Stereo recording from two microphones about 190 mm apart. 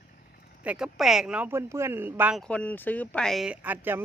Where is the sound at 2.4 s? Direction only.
5° left (ahead or behind); by 4.0 s 10° right (ahead or behind).